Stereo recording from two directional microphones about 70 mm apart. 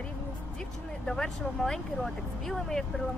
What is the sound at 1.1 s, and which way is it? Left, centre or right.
Speech, centre.